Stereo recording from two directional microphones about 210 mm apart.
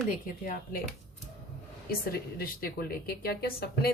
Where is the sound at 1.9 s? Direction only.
45° left (ahead or behind).